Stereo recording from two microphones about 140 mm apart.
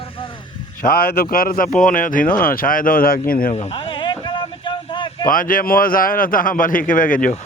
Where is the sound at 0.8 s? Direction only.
90° left.